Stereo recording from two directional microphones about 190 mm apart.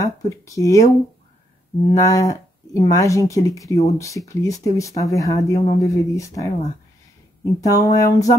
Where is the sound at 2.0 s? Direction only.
15° left (ahead or behind).